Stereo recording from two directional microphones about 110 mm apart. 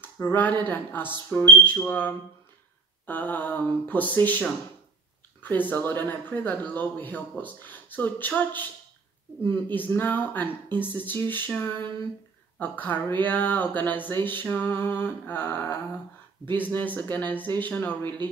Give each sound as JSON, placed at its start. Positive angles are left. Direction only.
{"t": 0.0, "sound": "speech", "side_deg": 20}